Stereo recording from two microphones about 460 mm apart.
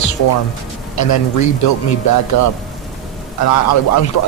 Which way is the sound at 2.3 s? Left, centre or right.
Left.